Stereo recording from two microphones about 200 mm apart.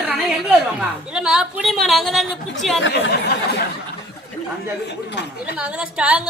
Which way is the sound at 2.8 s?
55° left (ahead or behind).